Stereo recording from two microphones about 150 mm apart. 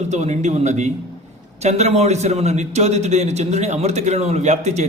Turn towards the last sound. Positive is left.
turn(degrees=-50)  # may be behind; listen again after turning